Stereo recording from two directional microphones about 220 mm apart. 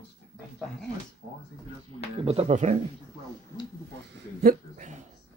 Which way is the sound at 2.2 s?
30° right (ahead or behind).